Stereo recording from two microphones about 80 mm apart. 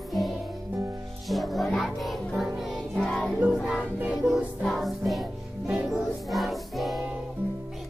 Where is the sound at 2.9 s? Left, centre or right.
Centre.